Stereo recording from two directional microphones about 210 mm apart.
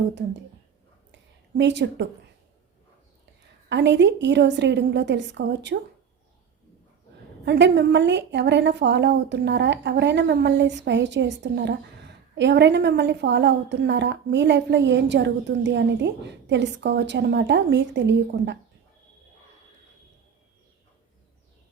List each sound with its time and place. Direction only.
1.1 s a sound: 55° right (ahead or behind)
3.7 s a woman's voice: 55° right (ahead or behind)
7.4 s a woman's voice: 55° right (ahead or behind)